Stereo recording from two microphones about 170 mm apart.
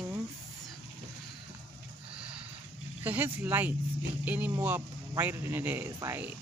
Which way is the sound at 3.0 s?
10° right (ahead or behind).